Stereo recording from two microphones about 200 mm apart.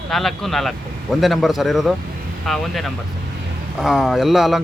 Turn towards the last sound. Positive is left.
turn(degrees=0)  # may be behind; listen again after turning